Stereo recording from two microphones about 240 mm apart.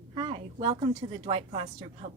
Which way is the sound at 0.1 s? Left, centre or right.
Right.